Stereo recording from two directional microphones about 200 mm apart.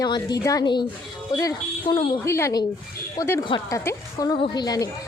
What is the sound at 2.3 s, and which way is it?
A woman's voice, 15° left (ahead or behind).